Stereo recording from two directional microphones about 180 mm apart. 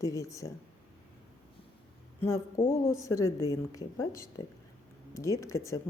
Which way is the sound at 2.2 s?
15° left (ahead or behind).